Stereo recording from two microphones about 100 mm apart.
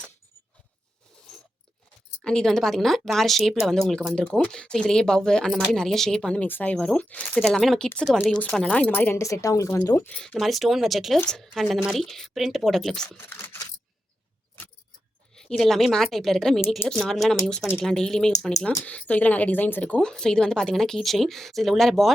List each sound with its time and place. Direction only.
2.2 s speech: 5° left (ahead or behind)
7.4 s speech: centre (ahead or behind)
8.3 s a woman's voice: 10° left (ahead or behind)
10.1 s speech: 10° left (ahead or behind)
13.1 s camera: 25° left (ahead or behind)
15.4 s speech: 5° left (ahead or behind)